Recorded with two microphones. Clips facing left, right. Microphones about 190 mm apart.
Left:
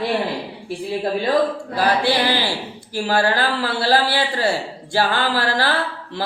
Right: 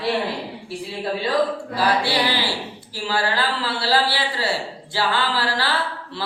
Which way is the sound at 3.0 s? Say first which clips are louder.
Left 4 dB; 50° left (ahead or behind).